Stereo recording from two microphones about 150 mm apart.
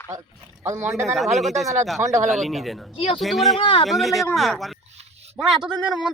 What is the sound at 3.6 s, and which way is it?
Speech, 35° left (ahead or behind).